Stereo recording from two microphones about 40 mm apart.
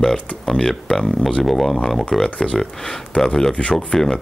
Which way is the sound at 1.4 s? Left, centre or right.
Centre.